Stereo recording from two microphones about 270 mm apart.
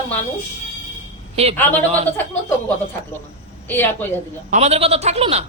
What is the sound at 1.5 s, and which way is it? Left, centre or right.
Speech, centre.